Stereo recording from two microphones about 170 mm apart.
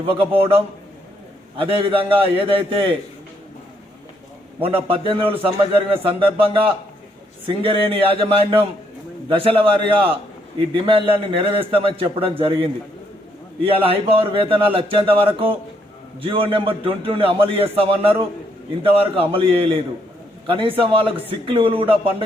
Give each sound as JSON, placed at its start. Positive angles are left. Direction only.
{"t": 0.0, "sound": "a man's voice", "side_deg": -30}
{"t": 4.6, "sound": "a man's voice", "side_deg": -30}